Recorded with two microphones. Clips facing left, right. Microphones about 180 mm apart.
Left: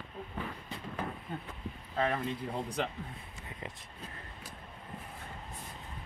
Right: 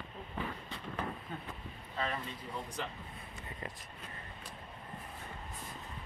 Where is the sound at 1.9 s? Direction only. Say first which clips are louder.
Left 6 dB; 60° left (ahead or behind).